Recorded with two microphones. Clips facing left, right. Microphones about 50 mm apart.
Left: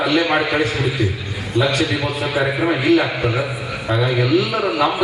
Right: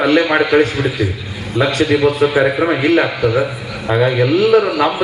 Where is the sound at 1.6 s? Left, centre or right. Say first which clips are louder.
Right 7 dB; right.